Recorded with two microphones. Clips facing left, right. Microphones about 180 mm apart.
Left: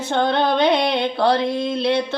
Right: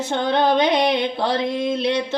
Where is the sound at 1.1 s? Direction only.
60° left (ahead or behind).